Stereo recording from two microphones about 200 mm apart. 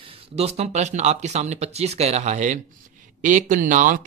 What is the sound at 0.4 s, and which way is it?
Speech, 30° right (ahead or behind).